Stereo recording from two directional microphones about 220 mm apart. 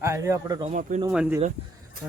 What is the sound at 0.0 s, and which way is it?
Speech, 15° right (ahead or behind).